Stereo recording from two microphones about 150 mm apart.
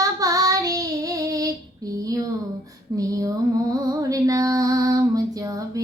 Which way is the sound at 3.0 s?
25° right (ahead or behind).